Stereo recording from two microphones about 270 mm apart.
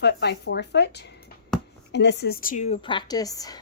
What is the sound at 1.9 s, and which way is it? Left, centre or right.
Speech, left.